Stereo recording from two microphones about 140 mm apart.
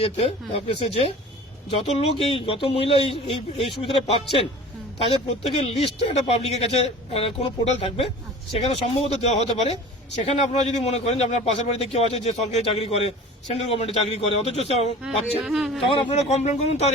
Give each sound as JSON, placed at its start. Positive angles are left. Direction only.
{"t": 0.0, "sound": "a man's voice", "side_deg": 45}
{"t": 5.4, "sound": "a man's voice", "side_deg": 45}
{"t": 15.0, "sound": "speech", "side_deg": -5}
{"t": 15.9, "sound": "a man's voice", "side_deg": 45}